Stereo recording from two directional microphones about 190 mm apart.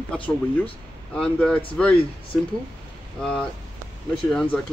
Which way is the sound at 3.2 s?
5° left (ahead or behind).